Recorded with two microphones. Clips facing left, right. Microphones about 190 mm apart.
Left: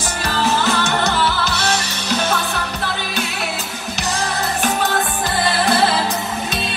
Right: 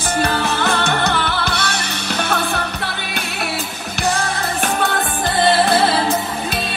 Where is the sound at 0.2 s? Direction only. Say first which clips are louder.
Left 1 dB; 60° right (ahead or behind).